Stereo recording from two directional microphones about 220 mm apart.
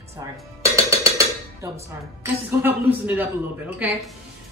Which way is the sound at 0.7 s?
15° right (ahead or behind).